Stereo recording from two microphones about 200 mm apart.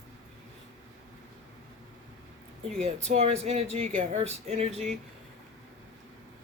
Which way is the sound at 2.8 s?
30° right (ahead or behind).